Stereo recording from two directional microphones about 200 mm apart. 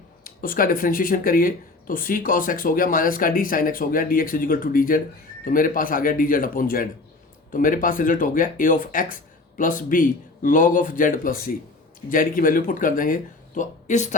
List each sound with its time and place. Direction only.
0.3 s speech: 45° left (ahead or behind)